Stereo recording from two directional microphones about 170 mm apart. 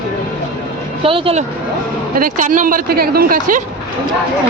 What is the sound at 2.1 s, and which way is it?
Speech, 55° right (ahead or behind).